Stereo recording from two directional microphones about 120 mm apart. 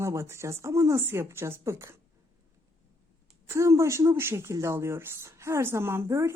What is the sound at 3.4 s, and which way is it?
A woman's voice, 25° right (ahead or behind).